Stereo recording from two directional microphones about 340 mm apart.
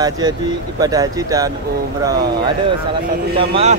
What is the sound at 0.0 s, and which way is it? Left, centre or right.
Speech, centre.